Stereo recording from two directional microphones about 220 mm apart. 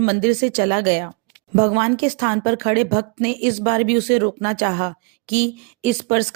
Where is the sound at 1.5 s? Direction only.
30° right (ahead or behind).